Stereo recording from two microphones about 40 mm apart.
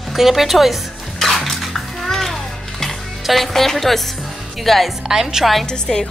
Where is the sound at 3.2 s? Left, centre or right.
Centre.